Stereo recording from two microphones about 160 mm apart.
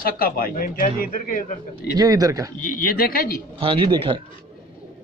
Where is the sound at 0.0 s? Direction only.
65° left (ahead or behind).